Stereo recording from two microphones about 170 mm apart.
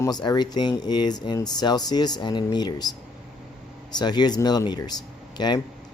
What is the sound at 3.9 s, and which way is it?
Speech, 25° left (ahead or behind).